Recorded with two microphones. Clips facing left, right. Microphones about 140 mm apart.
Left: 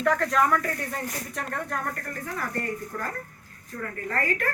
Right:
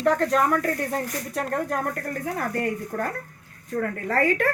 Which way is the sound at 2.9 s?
50° right (ahead or behind).